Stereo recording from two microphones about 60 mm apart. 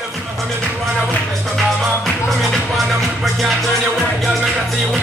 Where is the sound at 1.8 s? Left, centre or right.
Centre.